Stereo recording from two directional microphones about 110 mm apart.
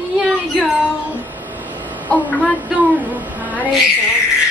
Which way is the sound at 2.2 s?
15° left (ahead or behind).